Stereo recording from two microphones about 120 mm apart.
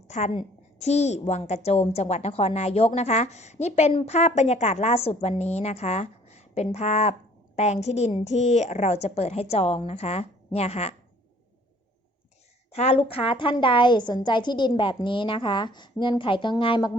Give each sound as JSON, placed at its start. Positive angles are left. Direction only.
{"t": 0.1, "sound": "a woman's voice", "side_deg": 85}
{"t": 0.8, "sound": "a woman's voice", "side_deg": 70}
{"t": 12.7, "sound": "a woman's voice", "side_deg": 60}